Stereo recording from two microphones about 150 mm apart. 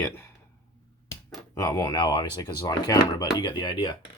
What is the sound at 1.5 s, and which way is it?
Speech, 20° left (ahead or behind).